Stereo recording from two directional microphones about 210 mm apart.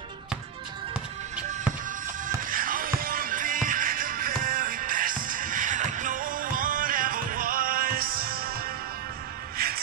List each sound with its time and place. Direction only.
2.2 s music: 40° right (ahead or behind)